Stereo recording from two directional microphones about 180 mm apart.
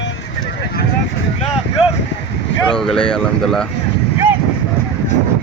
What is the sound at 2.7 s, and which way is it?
Speech, 5° left (ahead or behind).